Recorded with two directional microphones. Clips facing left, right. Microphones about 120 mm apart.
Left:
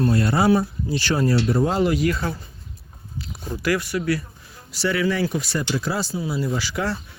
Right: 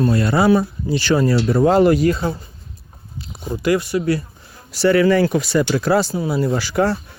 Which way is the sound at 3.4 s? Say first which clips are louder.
Right 5 dB; 20° right (ahead or behind).